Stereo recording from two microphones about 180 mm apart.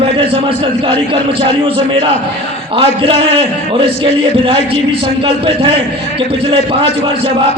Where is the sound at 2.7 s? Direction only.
30° right (ahead or behind).